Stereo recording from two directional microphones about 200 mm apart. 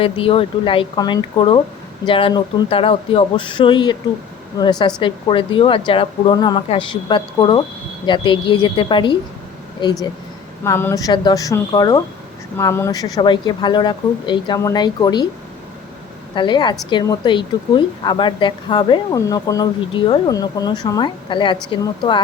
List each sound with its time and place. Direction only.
0.0 s a woman's voice: 25° left (ahead or behind)
16.3 s a woman's voice: 25° left (ahead or behind)